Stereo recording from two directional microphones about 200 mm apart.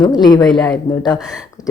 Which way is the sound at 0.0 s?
20° left (ahead or behind).